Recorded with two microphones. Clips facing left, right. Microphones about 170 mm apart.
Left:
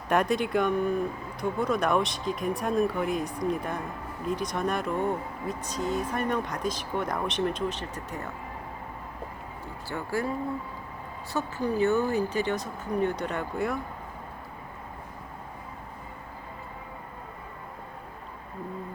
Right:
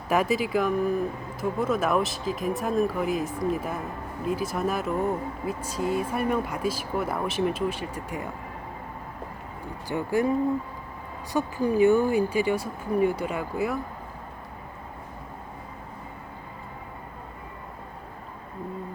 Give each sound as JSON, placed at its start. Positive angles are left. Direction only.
{"t": 0.1, "sound": "speech", "side_deg": -5}
{"t": 9.9, "sound": "speech", "side_deg": -20}